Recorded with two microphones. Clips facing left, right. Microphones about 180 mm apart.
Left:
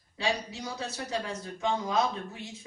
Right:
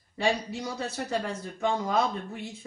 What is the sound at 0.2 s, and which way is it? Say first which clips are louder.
A man's voice: right 4 dB; 55° right (ahead or behind).